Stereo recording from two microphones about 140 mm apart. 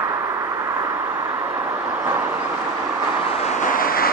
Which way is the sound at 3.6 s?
85° left.